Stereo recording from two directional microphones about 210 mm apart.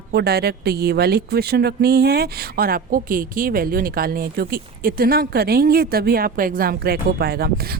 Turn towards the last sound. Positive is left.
turn(degrees=-50)  # may be behind; listen again after turning